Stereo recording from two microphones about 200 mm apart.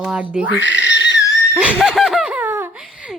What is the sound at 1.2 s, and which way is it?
Wheeze, 15° left (ahead or behind).